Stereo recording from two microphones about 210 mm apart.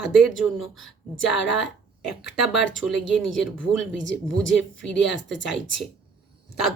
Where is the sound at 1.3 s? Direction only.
60° left (ahead or behind).